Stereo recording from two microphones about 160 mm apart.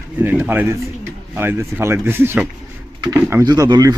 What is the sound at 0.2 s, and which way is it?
A man's voice, 10° right (ahead or behind).